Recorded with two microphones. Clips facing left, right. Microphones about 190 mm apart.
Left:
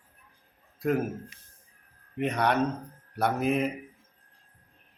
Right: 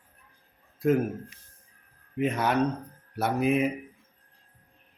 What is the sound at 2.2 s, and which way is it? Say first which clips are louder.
Speech: right 1 dB; 5° right (ahead or behind).